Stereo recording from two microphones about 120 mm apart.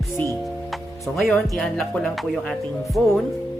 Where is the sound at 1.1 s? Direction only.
5° left (ahead or behind).